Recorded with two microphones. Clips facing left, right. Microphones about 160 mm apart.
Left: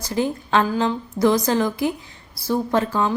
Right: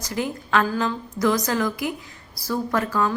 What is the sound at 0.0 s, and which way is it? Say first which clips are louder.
A woman's voice: left 4 dB; 30° left (ahead or behind).